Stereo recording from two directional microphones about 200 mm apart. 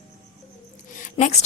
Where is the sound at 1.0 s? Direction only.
35° left (ahead or behind).